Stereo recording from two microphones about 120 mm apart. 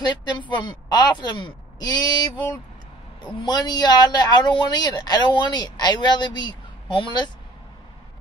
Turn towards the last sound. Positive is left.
turn(degrees=40)  # may be behind; listen again after turning